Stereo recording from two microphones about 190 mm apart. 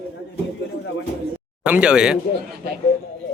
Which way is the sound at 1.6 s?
5° right (ahead or behind).